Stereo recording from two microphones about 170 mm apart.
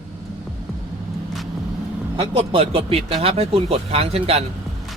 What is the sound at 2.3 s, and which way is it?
Speech, 35° right (ahead or behind).